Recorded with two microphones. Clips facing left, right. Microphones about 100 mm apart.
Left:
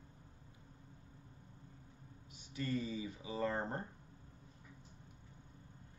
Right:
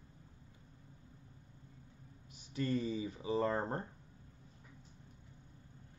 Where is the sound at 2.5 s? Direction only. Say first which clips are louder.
Right 4 dB; 35° right (ahead or behind).